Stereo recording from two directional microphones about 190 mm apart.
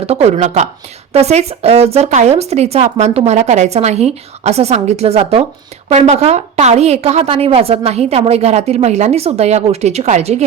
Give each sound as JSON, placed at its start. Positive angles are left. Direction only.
{"t": 0.0, "sound": "a woman's voice", "side_deg": -35}